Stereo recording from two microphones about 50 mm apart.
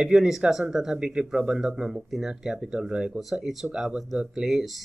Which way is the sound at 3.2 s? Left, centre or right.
Centre.